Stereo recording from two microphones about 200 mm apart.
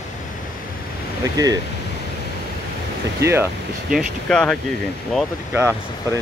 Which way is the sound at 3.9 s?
Centre (ahead or behind).